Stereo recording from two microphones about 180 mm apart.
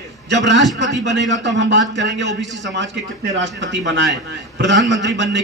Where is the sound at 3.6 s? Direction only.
75° right (ahead or behind).